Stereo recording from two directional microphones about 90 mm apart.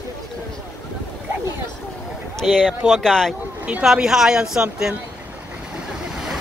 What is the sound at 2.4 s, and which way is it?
Speech, 5° left (ahead or behind).